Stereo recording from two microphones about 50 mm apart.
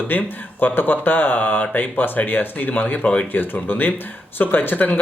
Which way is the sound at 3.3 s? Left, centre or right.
Left.